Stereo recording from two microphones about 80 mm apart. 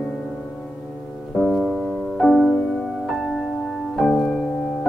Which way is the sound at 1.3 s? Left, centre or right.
Centre.